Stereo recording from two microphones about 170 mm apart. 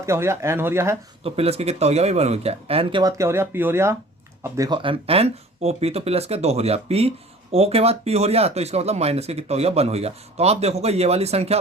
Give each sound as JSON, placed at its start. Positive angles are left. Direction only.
{"t": 0.0, "sound": "speech", "side_deg": -15}
{"t": 1.2, "sound": "speech", "side_deg": -35}
{"t": 3.0, "sound": "speech", "side_deg": -20}
{"t": 4.8, "sound": "speech", "side_deg": -30}